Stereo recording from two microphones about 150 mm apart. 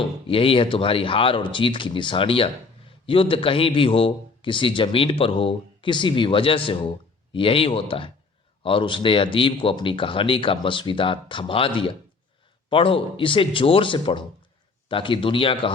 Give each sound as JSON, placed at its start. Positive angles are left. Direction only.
{"t": 0.0, "sound": "a man's voice", "side_deg": 35}